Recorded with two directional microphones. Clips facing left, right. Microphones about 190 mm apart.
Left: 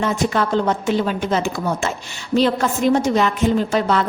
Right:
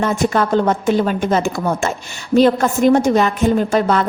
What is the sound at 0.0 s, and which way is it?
A woman's voice, 50° right (ahead or behind).